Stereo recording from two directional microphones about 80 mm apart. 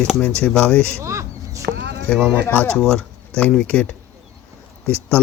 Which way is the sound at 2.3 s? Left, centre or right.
Left.